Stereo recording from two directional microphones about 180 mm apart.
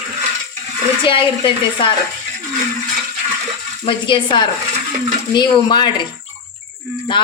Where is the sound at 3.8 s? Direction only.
25° left (ahead or behind).